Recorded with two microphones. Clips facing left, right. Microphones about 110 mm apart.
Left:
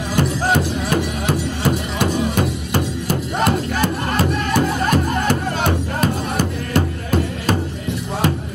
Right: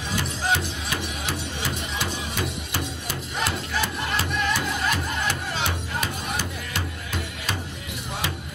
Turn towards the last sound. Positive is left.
turn(degrees=45)  # may be behind; listen again after turning